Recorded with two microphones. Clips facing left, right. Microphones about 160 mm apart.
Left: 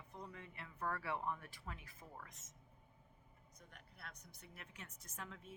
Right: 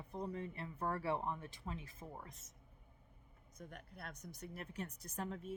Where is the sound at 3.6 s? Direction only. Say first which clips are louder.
Right 9 dB; 45° right (ahead or behind).